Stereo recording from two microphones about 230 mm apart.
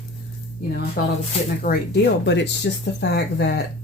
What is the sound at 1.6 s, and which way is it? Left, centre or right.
Speech, left.